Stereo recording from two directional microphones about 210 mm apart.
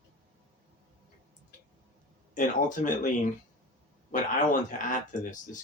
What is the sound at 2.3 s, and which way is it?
Speech, 40° left (ahead or behind).